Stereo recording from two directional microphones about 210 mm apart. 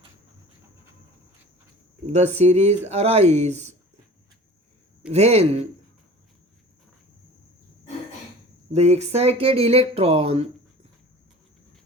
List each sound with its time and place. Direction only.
2.0 s speech: 30° right (ahead or behind)
5.1 s speech: 30° right (ahead or behind)
8.7 s speech: 30° right (ahead or behind)